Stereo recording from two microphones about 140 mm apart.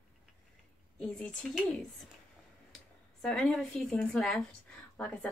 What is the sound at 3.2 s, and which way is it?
A woman's voice, centre (ahead or behind).